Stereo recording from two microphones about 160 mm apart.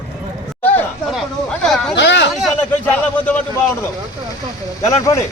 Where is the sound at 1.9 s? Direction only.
90° left.